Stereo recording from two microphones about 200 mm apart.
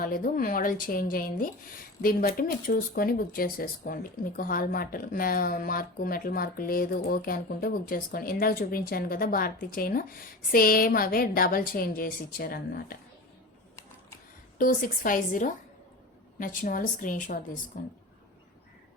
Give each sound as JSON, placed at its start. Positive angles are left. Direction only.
{"t": 0.0, "sound": "speech", "side_deg": 45}
{"t": 14.6, "sound": "a woman's voice", "side_deg": 45}